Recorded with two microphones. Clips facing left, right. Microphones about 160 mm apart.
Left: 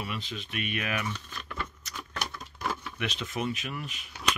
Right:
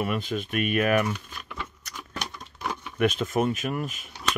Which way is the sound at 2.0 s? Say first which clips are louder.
Right 1 dB; 15° right (ahead or behind).